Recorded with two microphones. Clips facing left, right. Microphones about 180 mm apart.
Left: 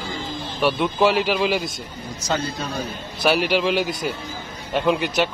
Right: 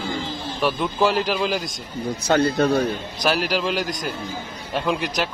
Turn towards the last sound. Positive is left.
turn(degrees=0)  # may be behind; listen again after turning